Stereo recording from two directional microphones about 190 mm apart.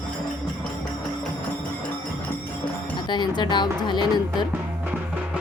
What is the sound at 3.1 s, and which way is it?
Speech, 25° left (ahead or behind).